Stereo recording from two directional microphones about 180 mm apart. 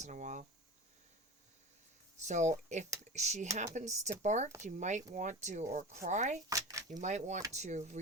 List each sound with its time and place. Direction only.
0.0 s speech: 40° right (ahead or behind)
2.2 s speech: 40° right (ahead or behind)
6.5 s speech: 20° right (ahead or behind)
7.0 s speech: 40° right (ahead or behind)